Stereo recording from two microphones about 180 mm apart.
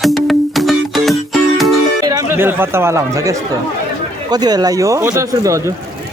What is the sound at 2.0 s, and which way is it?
Music, 20° right (ahead or behind).